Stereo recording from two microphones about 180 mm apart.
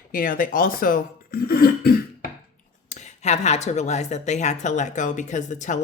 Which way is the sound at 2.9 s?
40° left (ahead or behind).